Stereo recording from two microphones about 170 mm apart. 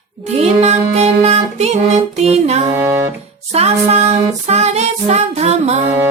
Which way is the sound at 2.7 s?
15° right (ahead or behind).